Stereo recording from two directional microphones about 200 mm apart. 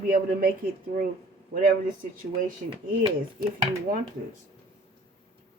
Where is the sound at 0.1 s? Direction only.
45° right (ahead or behind).